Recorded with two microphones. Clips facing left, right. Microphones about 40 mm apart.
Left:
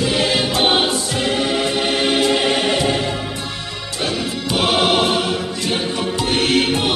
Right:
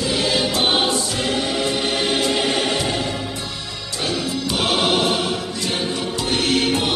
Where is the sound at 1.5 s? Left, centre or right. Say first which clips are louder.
Left 3 dB; left.